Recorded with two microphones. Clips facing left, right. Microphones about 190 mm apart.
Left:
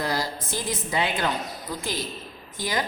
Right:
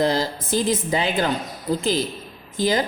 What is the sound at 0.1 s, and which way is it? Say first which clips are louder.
Speech: right 6 dB; 25° right (ahead or behind).